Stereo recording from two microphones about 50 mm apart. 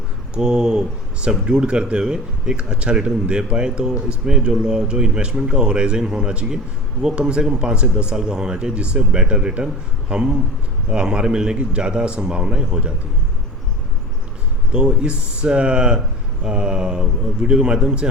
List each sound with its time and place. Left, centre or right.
0.3 s speech: centre
14.7 s speech: centre